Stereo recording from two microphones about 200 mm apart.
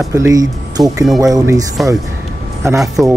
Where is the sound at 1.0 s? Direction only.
Centre (ahead or behind).